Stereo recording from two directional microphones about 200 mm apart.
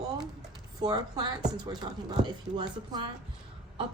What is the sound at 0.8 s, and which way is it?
A woman's voice, 20° right (ahead or behind).